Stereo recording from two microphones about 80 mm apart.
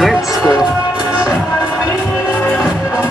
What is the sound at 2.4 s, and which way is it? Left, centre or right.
Music, centre.